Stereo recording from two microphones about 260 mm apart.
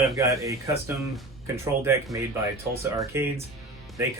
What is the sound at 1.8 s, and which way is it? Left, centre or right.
Speech, centre.